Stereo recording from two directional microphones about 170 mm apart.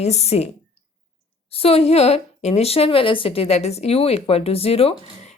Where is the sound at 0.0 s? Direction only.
40° left (ahead or behind).